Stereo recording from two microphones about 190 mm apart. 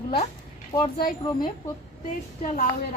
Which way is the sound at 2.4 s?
45° left (ahead or behind).